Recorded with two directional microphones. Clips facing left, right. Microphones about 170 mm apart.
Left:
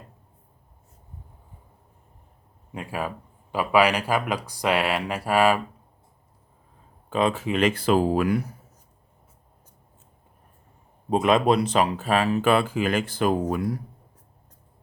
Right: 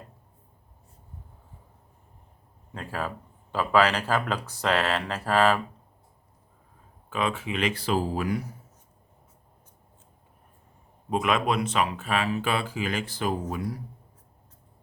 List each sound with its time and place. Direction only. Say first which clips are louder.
2.7 s speech: left 2 dB; 15° left (ahead or behind)
7.1 s speech: left 5 dB; 35° left (ahead or behind); by 8.4 s 60° left (ahead or behind)
11.1 s speech: left 5 dB; 35° left (ahead or behind); by 13.7 s 55° left (ahead or behind)